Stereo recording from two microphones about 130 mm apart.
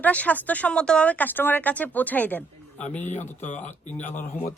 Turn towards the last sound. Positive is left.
turn(degrees=15)  # may be behind; listen again after turning